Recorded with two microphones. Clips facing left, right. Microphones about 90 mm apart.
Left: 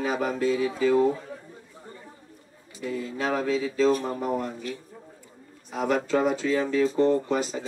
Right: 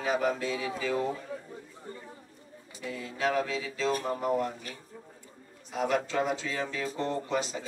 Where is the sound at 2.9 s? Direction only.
40° left (ahead or behind).